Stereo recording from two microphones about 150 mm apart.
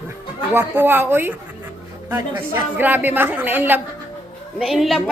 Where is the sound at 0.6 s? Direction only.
15° right (ahead or behind).